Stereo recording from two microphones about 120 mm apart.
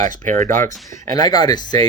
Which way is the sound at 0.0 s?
90° right.